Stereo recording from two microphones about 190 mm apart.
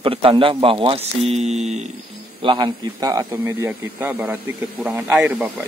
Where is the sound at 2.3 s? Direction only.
25° right (ahead or behind); by 5.5 s 10° right (ahead or behind).